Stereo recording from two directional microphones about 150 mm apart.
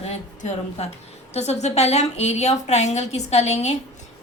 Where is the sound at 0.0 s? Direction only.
45° left (ahead or behind).